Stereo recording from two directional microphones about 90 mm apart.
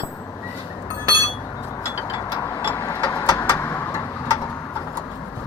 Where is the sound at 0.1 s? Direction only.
30° left (ahead or behind).